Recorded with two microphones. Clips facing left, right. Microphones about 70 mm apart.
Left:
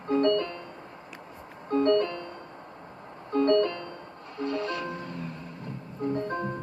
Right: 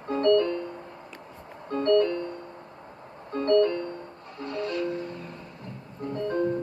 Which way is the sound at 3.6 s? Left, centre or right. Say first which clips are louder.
Right 4 dB; right.